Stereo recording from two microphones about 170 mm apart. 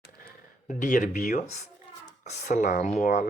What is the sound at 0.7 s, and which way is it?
Speech, 50° left (ahead or behind).